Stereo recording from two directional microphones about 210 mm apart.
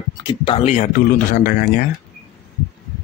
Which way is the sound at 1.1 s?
45° left (ahead or behind).